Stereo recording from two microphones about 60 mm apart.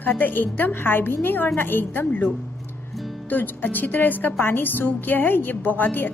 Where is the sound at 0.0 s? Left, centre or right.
Left.